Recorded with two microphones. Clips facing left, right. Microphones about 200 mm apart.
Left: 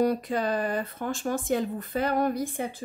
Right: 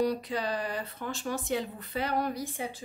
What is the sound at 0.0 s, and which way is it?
Speech, 50° left (ahead or behind).